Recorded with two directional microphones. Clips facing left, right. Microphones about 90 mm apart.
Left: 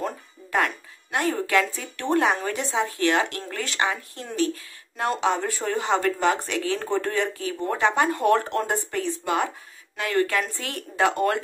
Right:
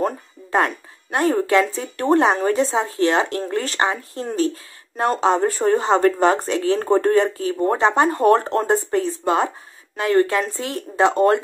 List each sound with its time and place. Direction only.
0.5 s speech: 35° right (ahead or behind)